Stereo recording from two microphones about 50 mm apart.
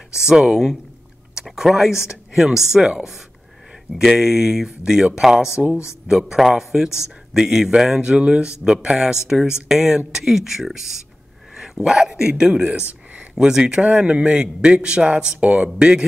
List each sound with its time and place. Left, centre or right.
0.1 s speech: centre
4.2 s speech: centre
8.0 s a man's voice: centre
13.8 s speech: right